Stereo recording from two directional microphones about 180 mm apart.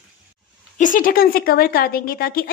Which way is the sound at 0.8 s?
50° left (ahead or behind).